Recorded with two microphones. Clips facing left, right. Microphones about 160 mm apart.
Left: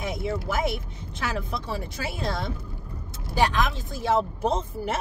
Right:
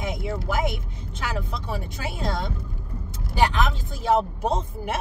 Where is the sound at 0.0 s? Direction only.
20° right (ahead or behind).